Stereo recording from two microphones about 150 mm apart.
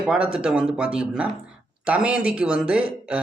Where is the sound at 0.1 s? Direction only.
5° right (ahead or behind).